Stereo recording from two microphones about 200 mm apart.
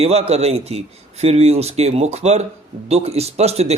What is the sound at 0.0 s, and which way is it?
Speech, 30° right (ahead or behind).